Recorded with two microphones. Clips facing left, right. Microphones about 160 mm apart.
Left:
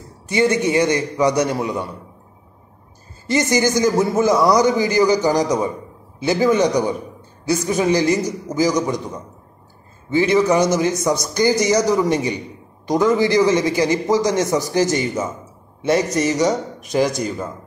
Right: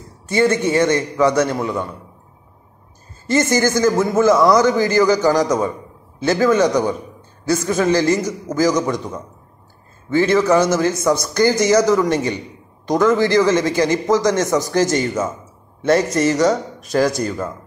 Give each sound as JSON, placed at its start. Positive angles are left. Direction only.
{"t": 0.3, "sound": "a man's voice", "side_deg": 15}
{"t": 3.3, "sound": "a man's voice", "side_deg": 15}